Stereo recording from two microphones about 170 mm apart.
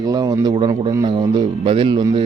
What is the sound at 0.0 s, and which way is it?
Speech, 20° right (ahead or behind).